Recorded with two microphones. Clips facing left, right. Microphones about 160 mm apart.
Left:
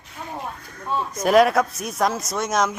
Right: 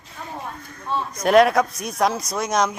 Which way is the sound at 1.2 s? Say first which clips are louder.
Right 1 dB; centre (ahead or behind).